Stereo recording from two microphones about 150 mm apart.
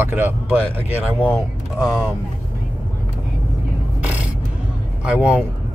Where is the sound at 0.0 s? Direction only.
15° right (ahead or behind).